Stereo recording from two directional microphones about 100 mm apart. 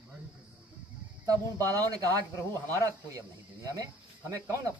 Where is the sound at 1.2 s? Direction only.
35° right (ahead or behind).